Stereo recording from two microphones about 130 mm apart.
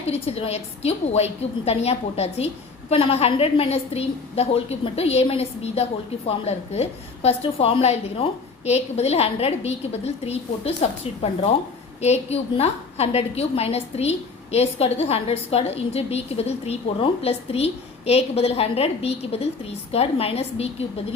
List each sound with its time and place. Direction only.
0.1 s a woman's voice: 50° left (ahead or behind)